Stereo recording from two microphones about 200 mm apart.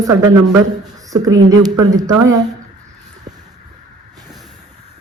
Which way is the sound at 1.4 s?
20° right (ahead or behind).